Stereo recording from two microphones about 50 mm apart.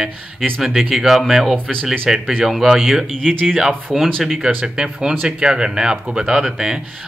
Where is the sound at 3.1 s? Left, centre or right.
Centre.